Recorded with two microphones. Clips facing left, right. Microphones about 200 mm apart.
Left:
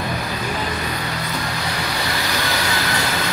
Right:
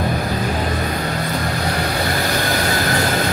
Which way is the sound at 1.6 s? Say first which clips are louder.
Right 5 dB; 50° right (ahead or behind).